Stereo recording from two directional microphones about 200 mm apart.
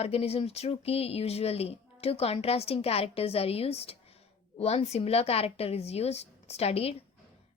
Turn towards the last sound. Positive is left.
turn(degrees=30)  # may be behind; listen again after turning